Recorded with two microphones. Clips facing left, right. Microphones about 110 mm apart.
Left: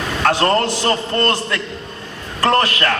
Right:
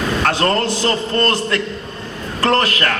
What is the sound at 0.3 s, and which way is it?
Speech, 30° left (ahead or behind).